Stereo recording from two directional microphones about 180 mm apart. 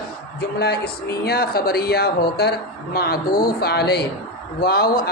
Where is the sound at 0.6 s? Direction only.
65° left (ahead or behind).